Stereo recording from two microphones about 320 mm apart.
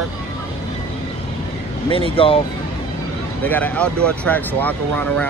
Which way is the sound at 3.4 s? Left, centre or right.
Centre.